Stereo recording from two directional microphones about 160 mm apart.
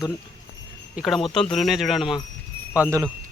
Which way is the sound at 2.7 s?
15° right (ahead or behind).